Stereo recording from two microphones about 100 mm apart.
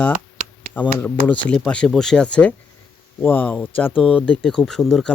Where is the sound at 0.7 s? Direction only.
15° left (ahead or behind).